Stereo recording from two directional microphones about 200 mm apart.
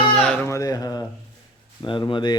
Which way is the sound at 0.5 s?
15° left (ahead or behind).